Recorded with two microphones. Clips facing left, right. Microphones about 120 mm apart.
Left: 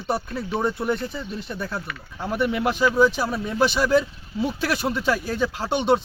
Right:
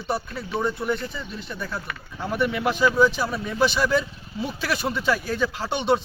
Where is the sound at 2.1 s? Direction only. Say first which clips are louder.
Left 1 dB; 5° left (ahead or behind).